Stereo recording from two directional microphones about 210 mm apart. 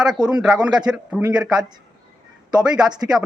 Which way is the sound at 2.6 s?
5° right (ahead or behind).